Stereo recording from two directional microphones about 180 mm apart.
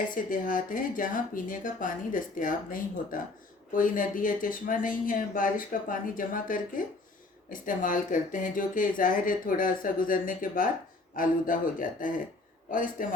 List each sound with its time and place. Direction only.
0.1 s speech: 50° left (ahead or behind)